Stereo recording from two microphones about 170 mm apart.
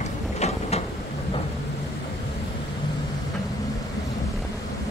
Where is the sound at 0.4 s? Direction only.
40° left (ahead or behind).